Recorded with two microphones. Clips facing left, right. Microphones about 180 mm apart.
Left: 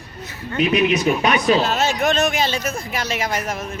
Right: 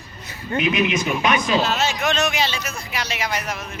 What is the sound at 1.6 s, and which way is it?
Speech, 50° left (ahead or behind).